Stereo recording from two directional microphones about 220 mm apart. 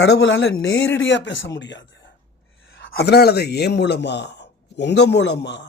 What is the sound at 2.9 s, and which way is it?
Speech, 45° left (ahead or behind).